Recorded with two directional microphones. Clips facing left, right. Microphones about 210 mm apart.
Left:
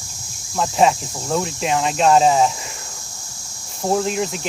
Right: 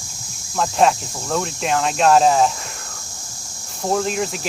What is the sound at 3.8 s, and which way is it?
Speech, 5° left (ahead or behind).